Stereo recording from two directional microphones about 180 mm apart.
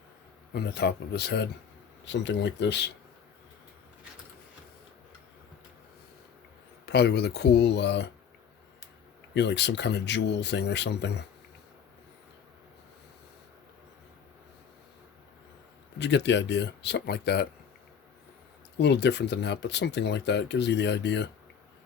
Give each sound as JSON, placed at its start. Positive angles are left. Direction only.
{"t": 0.5, "sound": "speech", "side_deg": 65}
{"t": 6.8, "sound": "speech", "side_deg": 65}
{"t": 9.3, "sound": "speech", "side_deg": 75}
{"t": 16.0, "sound": "speech", "side_deg": 75}
{"t": 18.8, "sound": "speech", "side_deg": 70}